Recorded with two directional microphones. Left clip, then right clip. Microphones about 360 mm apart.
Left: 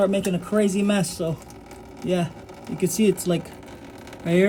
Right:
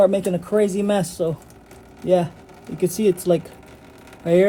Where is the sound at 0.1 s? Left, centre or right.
Centre.